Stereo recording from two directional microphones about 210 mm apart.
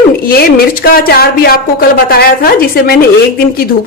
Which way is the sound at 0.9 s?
45° left (ahead or behind).